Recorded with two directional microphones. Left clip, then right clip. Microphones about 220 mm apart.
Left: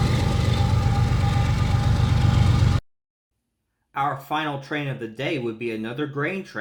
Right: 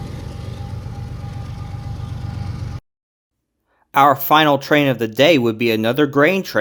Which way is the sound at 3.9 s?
55° right (ahead or behind).